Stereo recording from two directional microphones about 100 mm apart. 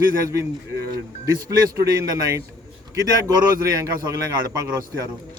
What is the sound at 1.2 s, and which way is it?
Speech, 35° right (ahead or behind).